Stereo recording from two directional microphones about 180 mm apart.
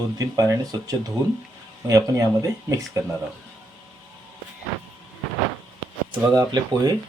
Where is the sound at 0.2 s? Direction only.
20° right (ahead or behind).